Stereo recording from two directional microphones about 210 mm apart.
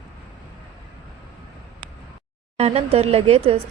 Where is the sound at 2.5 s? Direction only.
30° right (ahead or behind).